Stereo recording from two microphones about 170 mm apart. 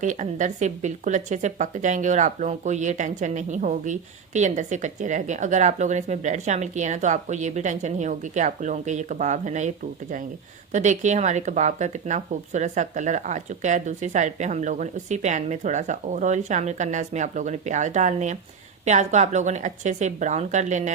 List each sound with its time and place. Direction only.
0.0 s speech: 45° right (ahead or behind)